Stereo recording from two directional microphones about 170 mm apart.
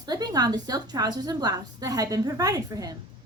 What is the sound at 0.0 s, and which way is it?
A woman's voice, 25° right (ahead or behind).